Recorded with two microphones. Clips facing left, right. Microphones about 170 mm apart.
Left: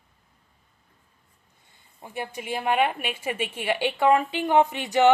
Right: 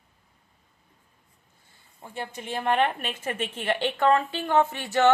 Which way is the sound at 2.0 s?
15° left (ahead or behind).